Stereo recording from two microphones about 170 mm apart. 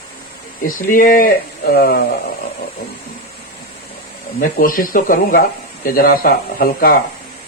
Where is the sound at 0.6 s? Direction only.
55° left (ahead or behind).